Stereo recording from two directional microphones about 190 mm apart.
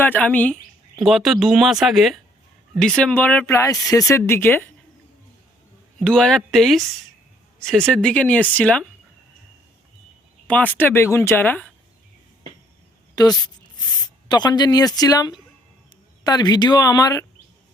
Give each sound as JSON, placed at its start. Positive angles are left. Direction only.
{"t": 0.0, "sound": "speech", "side_deg": 10}
{"t": 6.0, "sound": "speech", "side_deg": 5}
{"t": 10.4, "sound": "speech", "side_deg": 5}
{"t": 13.1, "sound": "a woman's voice", "side_deg": 20}